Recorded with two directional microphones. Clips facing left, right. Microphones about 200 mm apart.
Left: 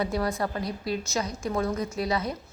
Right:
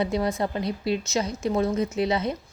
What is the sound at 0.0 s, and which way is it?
A woman's voice, 20° right (ahead or behind).